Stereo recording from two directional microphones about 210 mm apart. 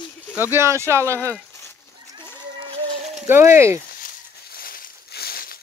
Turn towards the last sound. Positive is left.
turn(degrees=45)  # may be behind; listen again after turning